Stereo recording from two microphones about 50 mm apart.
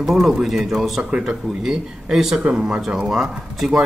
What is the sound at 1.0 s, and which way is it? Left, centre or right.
Speech, centre.